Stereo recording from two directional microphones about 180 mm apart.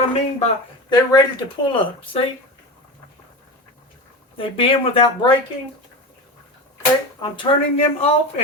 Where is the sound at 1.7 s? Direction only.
30° left (ahead or behind).